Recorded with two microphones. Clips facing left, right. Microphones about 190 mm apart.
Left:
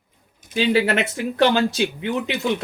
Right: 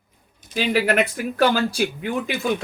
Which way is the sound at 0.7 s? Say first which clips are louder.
Right 1 dB; 25° left (ahead or behind).